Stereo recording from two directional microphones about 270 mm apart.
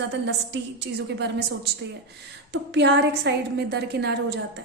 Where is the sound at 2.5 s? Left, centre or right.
Right.